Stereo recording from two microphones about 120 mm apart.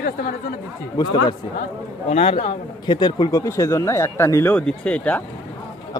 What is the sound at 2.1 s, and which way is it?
Speech, 55° left (ahead or behind).